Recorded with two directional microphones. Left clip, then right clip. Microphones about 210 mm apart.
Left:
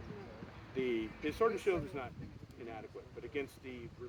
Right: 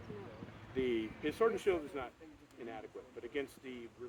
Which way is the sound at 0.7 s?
20° right (ahead or behind).